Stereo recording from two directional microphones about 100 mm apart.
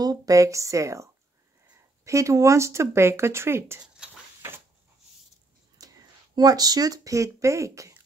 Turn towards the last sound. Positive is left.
turn(degrees=-30)  # may be behind; listen again after turning